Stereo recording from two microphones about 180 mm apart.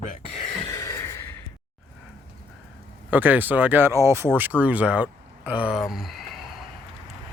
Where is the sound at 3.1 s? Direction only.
10° right (ahead or behind).